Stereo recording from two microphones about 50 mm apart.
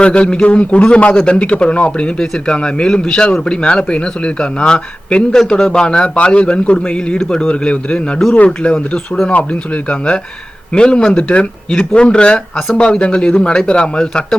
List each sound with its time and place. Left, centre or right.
0.0 s a man's voice: left
11.7 s a man's voice: centre